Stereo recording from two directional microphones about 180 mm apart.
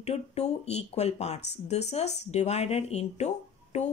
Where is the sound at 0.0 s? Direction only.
35° left (ahead or behind).